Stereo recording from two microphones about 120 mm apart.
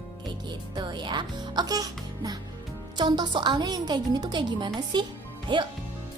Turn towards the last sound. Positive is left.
turn(degrees=-40)  # may be behind; listen again after turning